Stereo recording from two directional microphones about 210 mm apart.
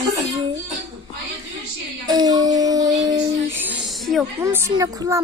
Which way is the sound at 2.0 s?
20° right (ahead or behind).